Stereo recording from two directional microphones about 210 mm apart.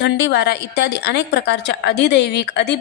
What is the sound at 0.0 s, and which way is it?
A woman's voice, 50° left (ahead or behind).